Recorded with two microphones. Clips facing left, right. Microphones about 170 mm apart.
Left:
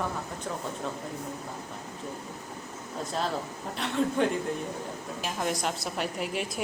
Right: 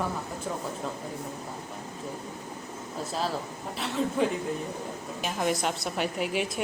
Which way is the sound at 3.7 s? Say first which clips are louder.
Left 1 dB; centre (ahead or behind).